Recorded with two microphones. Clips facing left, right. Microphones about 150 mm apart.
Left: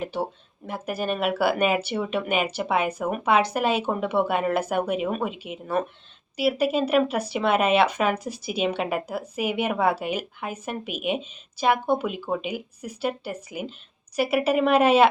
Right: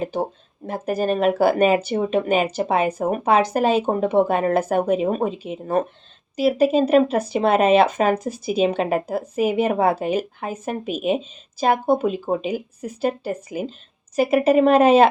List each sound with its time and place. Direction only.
0.0 s speech: 45° right (ahead or behind)
10.1 s speech: 35° right (ahead or behind)